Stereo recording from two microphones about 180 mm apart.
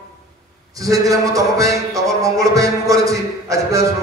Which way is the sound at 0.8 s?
20° right (ahead or behind).